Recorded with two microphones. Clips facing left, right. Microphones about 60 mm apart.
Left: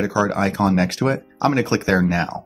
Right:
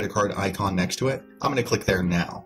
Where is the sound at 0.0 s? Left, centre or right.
Left.